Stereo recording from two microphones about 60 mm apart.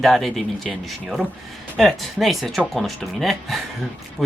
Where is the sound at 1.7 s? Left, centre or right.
Centre.